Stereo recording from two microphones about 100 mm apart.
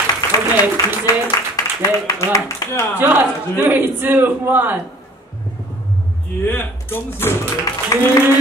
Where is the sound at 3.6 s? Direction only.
20° right (ahead or behind).